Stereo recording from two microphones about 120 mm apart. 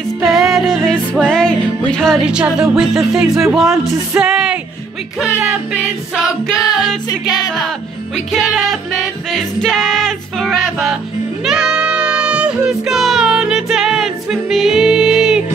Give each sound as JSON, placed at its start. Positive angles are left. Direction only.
{"t": 0.2, "sound": "music", "side_deg": 0}
{"t": 2.2, "sound": "music", "side_deg": -5}
{"t": 6.5, "sound": "music", "side_deg": 35}
{"t": 8.3, "sound": "music", "side_deg": 0}